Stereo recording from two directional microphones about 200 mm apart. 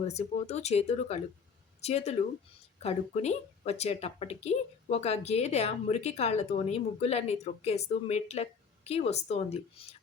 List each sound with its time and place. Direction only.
0.1 s speech: 35° left (ahead or behind)